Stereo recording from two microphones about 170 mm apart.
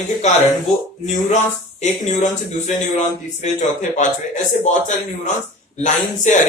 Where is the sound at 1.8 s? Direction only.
45° left (ahead or behind).